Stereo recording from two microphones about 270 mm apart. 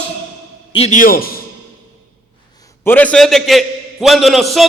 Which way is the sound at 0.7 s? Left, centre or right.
Left.